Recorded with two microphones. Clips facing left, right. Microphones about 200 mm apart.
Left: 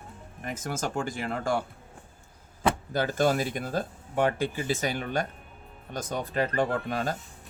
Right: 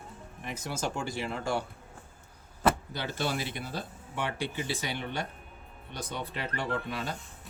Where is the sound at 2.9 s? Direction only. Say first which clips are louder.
Left 8 dB; 45° left (ahead or behind).